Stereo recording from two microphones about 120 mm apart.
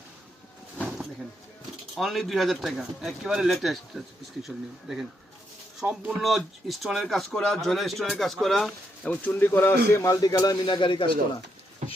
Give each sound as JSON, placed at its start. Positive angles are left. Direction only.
{"t": 2.0, "sound": "speech", "side_deg": 0}
{"t": 9.0, "sound": "a man's voice", "side_deg": 15}